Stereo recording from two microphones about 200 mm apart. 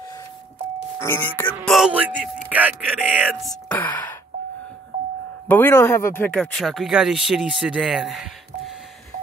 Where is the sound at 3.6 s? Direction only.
10° left (ahead or behind).